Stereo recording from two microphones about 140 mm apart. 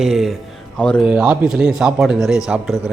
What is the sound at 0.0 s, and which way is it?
A man's voice, centre (ahead or behind).